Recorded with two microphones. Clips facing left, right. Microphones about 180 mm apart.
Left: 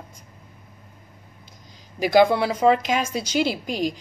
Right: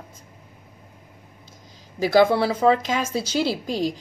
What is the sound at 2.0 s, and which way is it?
A woman's voice, 15° left (ahead or behind).